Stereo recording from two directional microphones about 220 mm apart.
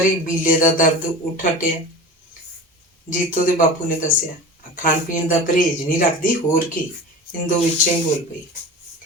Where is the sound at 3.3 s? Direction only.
35° left (ahead or behind).